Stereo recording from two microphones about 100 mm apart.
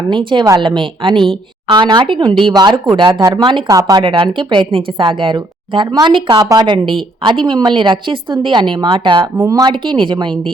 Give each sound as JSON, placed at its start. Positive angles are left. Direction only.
{"t": 0.1, "sound": "a woman's voice", "side_deg": -55}
{"t": 3.1, "sound": "speech", "side_deg": -35}
{"t": 4.0, "sound": "a woman's voice", "side_deg": -60}
{"t": 9.4, "sound": "speech", "side_deg": -35}
{"t": 9.6, "sound": "a woman's voice", "side_deg": -55}